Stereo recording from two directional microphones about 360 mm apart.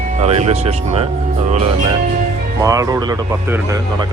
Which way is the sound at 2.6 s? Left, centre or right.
Centre.